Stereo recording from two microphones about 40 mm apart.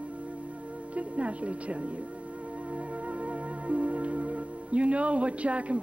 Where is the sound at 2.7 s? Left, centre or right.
Right.